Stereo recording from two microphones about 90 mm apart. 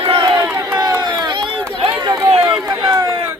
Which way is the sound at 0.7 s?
30° right (ahead or behind).